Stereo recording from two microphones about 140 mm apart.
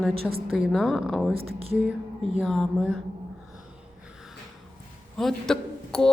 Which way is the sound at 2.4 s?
5° left (ahead or behind).